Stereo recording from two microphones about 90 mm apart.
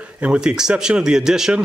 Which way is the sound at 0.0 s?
15° right (ahead or behind).